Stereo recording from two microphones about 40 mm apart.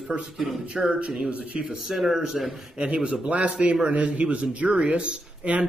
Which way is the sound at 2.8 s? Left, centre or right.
Right.